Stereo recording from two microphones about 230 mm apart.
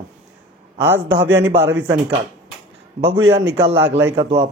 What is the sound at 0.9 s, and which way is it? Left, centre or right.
Speech, right.